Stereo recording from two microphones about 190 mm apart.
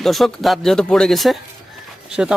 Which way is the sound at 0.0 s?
Centre (ahead or behind).